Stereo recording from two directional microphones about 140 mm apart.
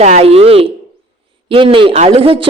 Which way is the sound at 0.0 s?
50° right (ahead or behind).